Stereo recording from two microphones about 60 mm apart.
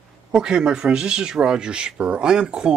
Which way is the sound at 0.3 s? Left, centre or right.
Centre.